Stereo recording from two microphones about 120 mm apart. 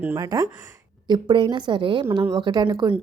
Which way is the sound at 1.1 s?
40° right (ahead or behind).